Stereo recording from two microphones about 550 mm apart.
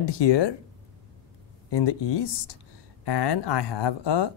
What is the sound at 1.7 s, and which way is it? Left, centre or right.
Speech, left.